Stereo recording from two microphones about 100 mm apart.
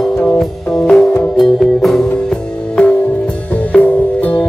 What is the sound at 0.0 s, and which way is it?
Music, 5° left (ahead or behind).